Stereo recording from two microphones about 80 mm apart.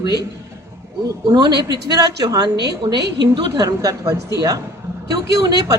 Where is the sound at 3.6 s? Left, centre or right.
Right.